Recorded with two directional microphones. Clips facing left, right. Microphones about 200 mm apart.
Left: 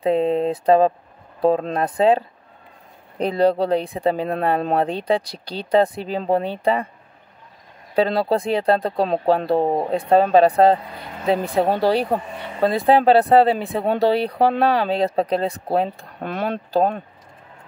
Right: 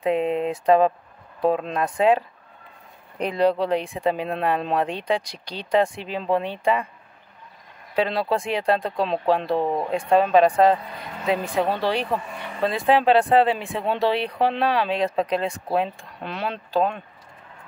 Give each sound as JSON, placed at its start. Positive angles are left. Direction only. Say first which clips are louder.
{"t": 0.0, "sound": "speech", "louder": "left 4 dB", "side_deg": 35}
{"t": 7.9, "sound": "speech", "louder": "left 4 dB", "side_deg": 35}